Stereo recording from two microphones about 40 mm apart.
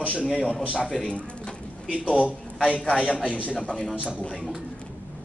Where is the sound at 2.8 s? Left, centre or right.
Centre.